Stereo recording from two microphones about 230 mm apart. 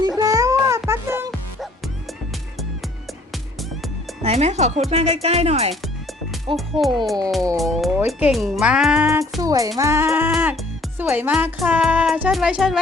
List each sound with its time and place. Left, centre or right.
0.2 s music: centre
4.2 s speech: right
6.8 s speech: centre